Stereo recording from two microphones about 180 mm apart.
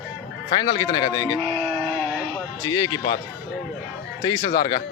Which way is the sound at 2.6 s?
20° left (ahead or behind).